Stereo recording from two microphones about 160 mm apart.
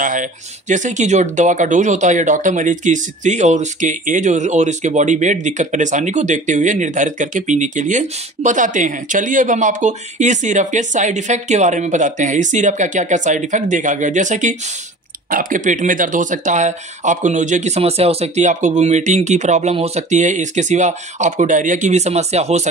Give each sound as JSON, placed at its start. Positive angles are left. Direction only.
{"t": 0.0, "sound": "speech", "side_deg": -55}